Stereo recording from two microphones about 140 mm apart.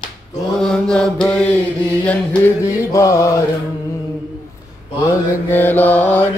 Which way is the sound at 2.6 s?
20° left (ahead or behind).